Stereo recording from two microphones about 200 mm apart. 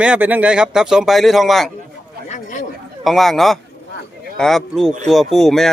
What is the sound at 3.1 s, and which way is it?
Speech, centre (ahead or behind).